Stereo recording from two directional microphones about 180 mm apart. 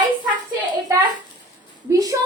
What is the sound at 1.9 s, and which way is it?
Speech, 20° right (ahead or behind).